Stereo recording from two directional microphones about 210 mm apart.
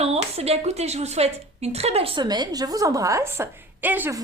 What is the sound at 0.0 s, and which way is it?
A woman's voice, 30° right (ahead or behind).